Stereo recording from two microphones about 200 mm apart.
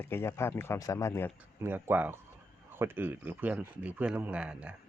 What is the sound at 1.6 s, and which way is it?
A man's voice, 10° right (ahead or behind).